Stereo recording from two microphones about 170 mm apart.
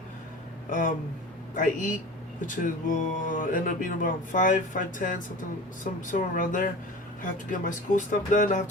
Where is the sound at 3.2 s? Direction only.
50° left (ahead or behind).